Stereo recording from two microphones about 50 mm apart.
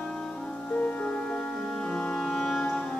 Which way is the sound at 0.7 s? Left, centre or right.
Left.